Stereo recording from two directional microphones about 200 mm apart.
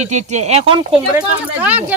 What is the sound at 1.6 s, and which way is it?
Speech, 10° right (ahead or behind).